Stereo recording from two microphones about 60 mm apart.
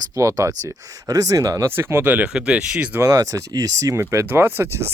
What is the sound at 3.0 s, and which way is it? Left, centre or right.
Speech, right.